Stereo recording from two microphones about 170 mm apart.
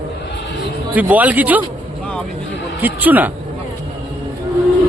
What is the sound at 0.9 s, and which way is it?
Speech, 10° right (ahead or behind).